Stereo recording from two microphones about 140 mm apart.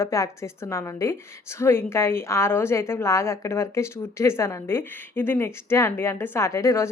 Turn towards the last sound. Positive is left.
turn(degrees=20)  # may be behind; listen again after turning